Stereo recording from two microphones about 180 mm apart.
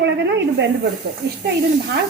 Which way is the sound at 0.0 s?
75° right (ahead or behind).